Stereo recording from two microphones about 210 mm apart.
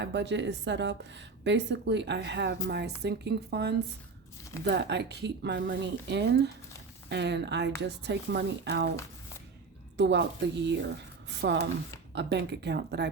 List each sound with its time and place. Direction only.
0.0 s a woman's voice: 55° right (ahead or behind)
10.0 s a woman's voice: 55° right (ahead or behind)